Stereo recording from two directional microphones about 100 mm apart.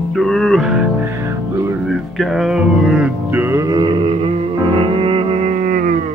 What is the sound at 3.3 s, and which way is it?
Music, 20° right (ahead or behind).